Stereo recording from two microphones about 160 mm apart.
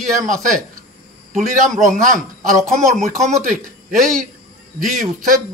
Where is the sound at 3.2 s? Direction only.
55° right (ahead or behind).